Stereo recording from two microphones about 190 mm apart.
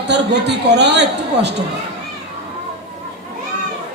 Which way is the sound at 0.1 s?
65° right (ahead or behind).